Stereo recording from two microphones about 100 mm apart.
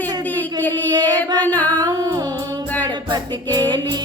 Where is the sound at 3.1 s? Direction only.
40° right (ahead or behind).